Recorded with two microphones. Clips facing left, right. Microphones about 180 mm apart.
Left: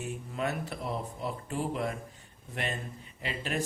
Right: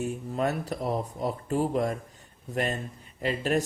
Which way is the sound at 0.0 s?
40° right (ahead or behind).